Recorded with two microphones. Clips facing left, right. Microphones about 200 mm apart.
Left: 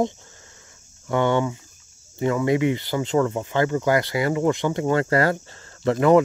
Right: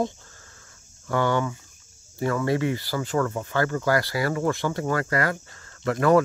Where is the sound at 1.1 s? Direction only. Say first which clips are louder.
Left 3 dB; 20° left (ahead or behind).